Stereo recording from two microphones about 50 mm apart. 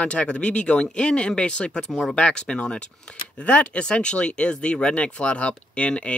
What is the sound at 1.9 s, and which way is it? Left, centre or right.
Speech, centre.